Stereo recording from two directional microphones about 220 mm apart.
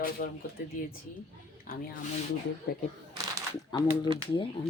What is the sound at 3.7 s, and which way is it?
Speech, 20° left (ahead or behind).